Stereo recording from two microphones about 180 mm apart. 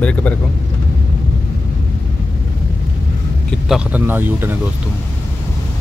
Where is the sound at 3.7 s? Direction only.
5° right (ahead or behind).